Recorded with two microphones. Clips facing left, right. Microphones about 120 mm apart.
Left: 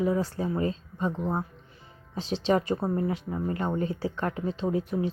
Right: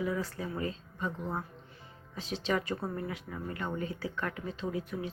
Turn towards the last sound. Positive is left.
turn(degrees=30)  # may be behind; listen again after turning